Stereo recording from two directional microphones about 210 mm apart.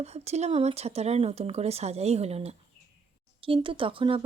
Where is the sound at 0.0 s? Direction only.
30° right (ahead or behind).